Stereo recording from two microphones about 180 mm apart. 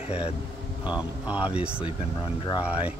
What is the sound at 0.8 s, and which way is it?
Speech, 5° right (ahead or behind).